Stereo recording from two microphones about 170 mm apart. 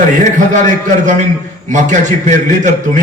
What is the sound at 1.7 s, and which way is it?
A man's voice, 45° right (ahead or behind).